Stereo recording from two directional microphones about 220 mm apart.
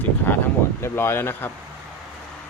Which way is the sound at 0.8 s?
10° left (ahead or behind).